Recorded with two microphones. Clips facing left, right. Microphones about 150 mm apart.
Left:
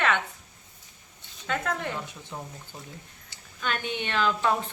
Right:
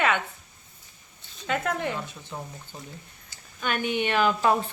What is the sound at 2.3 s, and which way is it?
Speech, 5° left (ahead or behind).